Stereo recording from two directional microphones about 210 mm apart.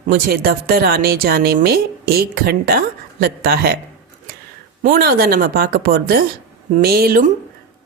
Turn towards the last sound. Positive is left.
turn(degrees=-45)  # may be behind; listen again after turning